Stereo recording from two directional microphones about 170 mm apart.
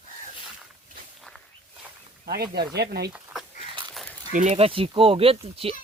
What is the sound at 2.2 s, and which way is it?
Speech, 70° right (ahead or behind).